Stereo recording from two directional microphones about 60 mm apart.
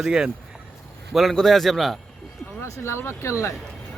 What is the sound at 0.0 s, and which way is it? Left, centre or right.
Speech, centre.